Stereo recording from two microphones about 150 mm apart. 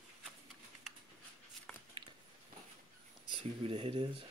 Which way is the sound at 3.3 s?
35° right (ahead or behind).